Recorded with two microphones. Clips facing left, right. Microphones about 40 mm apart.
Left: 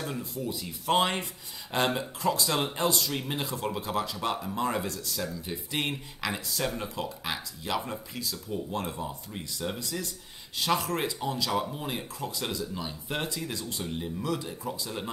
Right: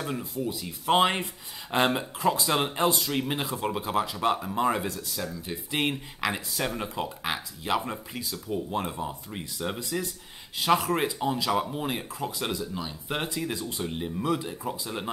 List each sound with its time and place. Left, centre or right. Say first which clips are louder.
0.0 s speech: right 3 dB; centre
0.9 s speech: right 3 dB; right
5.1 s speech: even; centre
12.7 s speech: right 2 dB; centre
13.2 s speech: right 3 dB; right